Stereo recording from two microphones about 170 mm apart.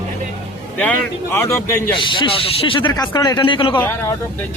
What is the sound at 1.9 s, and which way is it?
Speech, 30° left (ahead or behind).